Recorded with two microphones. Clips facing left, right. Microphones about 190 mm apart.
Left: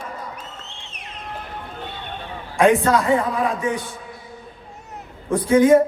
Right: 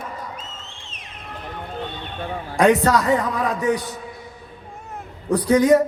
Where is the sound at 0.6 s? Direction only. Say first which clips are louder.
Left 1 dB; 65° left (ahead or behind).